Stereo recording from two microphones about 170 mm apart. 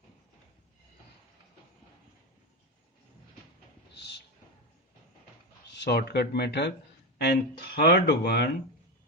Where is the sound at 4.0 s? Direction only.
85° left.